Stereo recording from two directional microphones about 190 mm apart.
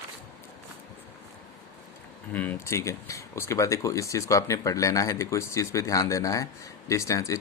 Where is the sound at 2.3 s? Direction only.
10° left (ahead or behind).